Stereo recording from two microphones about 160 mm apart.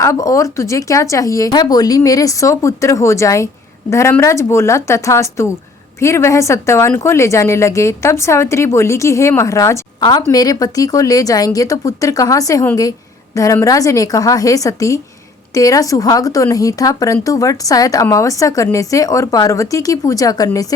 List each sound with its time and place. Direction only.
0.0 s a woman's voice: 20° left (ahead or behind)